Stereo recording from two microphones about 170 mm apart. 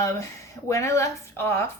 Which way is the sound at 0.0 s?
20° left (ahead or behind).